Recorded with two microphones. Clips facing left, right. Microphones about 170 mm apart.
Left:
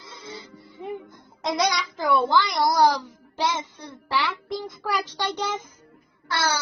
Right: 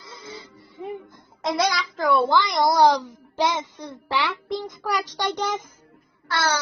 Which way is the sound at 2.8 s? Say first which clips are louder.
Right 3 dB; 20° right (ahead or behind).